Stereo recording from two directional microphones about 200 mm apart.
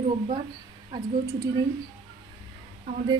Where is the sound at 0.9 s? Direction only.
15° right (ahead or behind).